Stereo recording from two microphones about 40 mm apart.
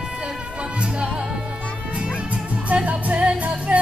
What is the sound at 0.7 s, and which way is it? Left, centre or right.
Music, right.